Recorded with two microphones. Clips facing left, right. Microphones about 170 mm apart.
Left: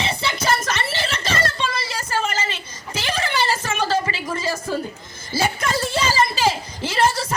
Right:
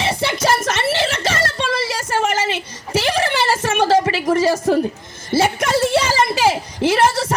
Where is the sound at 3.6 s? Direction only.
75° right (ahead or behind).